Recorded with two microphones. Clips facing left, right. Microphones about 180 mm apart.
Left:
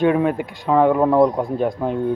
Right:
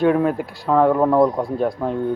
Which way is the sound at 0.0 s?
Centre (ahead or behind).